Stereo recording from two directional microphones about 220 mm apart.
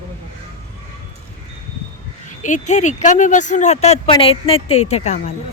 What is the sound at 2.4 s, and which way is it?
Speech, 35° left (ahead or behind).